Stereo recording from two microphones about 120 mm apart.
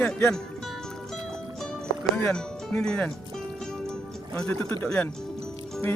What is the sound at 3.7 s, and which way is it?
Music, 5° left (ahead or behind).